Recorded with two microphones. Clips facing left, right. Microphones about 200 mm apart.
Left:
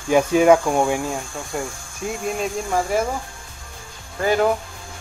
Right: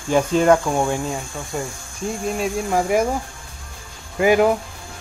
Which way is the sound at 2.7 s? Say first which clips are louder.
Right 3 dB; 10° right (ahead or behind).